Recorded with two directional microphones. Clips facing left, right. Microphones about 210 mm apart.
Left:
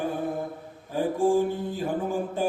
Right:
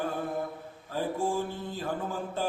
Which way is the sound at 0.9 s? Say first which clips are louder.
Left 7 dB; 15° left (ahead or behind).